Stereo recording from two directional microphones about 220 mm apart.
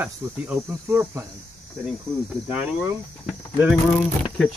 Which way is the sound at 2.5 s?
10° right (ahead or behind).